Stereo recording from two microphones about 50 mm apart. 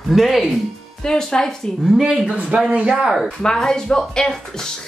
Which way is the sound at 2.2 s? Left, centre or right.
Right.